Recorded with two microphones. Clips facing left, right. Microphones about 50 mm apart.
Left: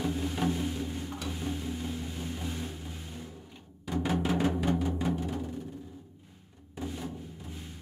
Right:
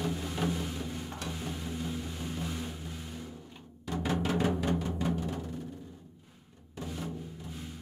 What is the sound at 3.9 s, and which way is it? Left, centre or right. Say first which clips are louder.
Music: left 2 dB; centre.